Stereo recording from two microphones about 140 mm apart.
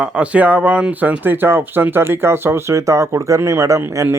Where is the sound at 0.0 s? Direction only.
10° right (ahead or behind).